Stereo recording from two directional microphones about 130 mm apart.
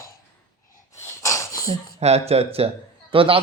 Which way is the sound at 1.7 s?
50° right (ahead or behind).